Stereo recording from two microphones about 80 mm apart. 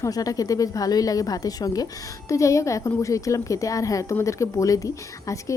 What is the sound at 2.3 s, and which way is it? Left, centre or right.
A woman's voice, left.